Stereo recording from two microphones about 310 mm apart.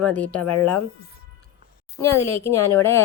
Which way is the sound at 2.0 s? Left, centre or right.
Centre.